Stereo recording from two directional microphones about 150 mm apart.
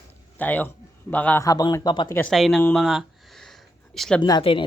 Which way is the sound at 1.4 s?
25° left (ahead or behind).